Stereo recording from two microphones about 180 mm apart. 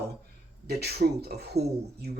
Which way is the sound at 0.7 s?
60° right (ahead or behind).